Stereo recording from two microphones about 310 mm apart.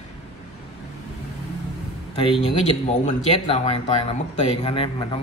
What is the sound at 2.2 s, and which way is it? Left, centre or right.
Speech, centre.